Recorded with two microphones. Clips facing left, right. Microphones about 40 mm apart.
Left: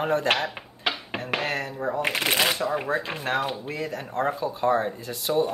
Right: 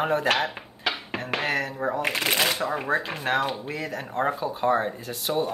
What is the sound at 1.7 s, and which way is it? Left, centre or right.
Speech, centre.